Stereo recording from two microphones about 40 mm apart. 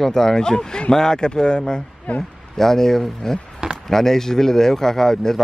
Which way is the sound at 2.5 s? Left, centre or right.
Centre.